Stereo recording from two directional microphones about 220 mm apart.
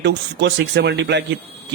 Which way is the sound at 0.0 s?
50° right (ahead or behind).